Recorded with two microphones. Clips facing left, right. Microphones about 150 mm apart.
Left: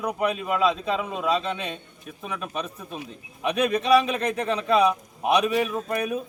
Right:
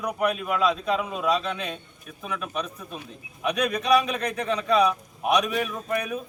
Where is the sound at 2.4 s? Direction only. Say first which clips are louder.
Even; 35° left (ahead or behind).